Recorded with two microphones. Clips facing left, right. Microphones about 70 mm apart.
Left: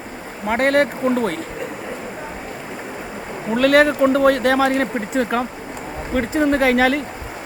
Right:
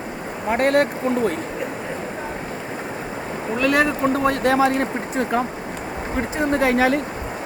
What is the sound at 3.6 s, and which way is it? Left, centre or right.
Speech, left.